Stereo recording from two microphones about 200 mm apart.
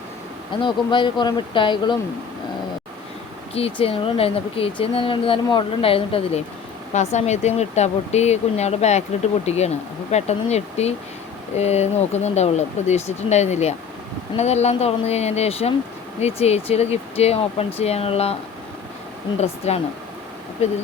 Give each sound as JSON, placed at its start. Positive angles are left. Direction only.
{"t": 0.6, "sound": "speech", "side_deg": 25}
{"t": 3.5, "sound": "speech", "side_deg": 30}
{"t": 19.4, "sound": "speech", "side_deg": 30}